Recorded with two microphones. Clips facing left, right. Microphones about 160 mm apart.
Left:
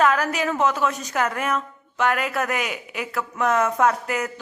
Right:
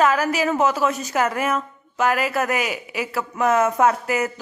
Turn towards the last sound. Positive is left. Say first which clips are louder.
# right 2 dB
turn(degrees=-5)  # may be behind; listen again after turning